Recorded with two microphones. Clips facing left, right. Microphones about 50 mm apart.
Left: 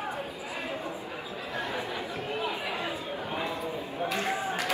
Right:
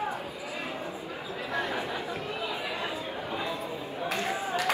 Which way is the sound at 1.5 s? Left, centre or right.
Right.